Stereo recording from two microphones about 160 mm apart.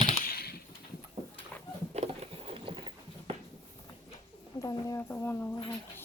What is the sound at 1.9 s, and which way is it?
Patter, 40° right (ahead or behind).